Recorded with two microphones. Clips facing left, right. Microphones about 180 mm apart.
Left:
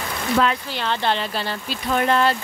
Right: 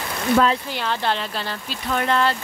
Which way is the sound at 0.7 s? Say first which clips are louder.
Left 1 dB; 5° right (ahead or behind).